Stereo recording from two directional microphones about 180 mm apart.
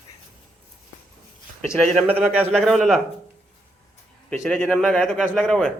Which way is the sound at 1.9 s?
10° right (ahead or behind).